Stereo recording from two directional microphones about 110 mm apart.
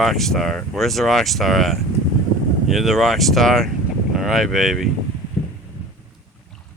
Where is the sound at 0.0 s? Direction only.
Centre (ahead or behind).